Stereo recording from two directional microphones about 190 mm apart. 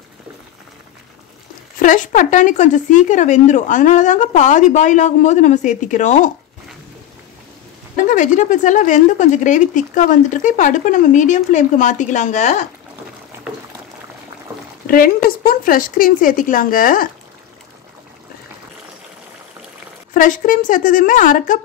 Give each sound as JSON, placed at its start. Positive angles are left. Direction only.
{"t": 1.8, "sound": "speech", "side_deg": 45}
{"t": 7.9, "sound": "speech", "side_deg": 45}
{"t": 15.2, "sound": "speech", "side_deg": 50}
{"t": 20.2, "sound": "speech", "side_deg": 45}